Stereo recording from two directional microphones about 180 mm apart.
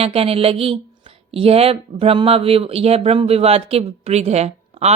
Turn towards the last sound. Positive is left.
turn(degrees=-35)  # may be behind; listen again after turning